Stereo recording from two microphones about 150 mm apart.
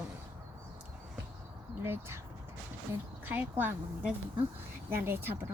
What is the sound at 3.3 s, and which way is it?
Speech, 10° right (ahead or behind).